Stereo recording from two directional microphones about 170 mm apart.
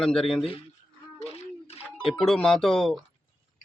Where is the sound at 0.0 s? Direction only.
5° left (ahead or behind).